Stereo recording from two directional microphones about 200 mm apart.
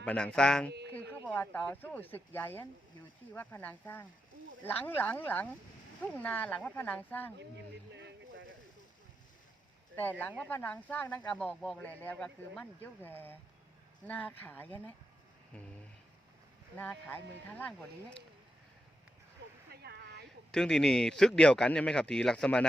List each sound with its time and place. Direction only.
0.0 s speech: 5° left (ahead or behind)
7.9 s a sound: 60° right (ahead or behind)
9.9 s speech: 10° left (ahead or behind)
16.7 s speech: 10° left (ahead or behind)
19.7 s a sound: 55° right (ahead or behind)
20.5 s speech: 5° left (ahead or behind)